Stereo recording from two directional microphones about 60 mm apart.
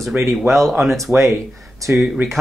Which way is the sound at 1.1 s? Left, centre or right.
Right.